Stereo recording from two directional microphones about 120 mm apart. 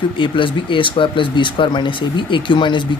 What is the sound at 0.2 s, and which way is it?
Speech, 45° left (ahead or behind).